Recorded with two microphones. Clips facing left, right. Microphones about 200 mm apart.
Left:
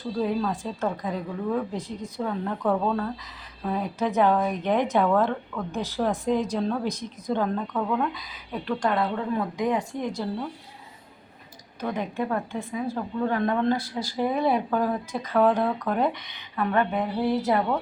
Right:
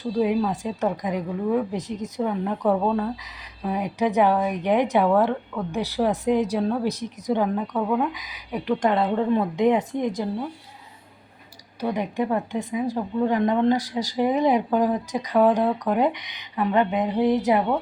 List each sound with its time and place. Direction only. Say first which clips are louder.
0.2 s a woman's voice: right 4 dB; 15° right (ahead or behind)
11.8 s speech: right 3 dB; 15° right (ahead or behind)